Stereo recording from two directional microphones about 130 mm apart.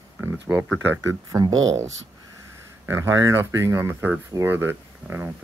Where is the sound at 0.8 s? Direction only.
20° right (ahead or behind).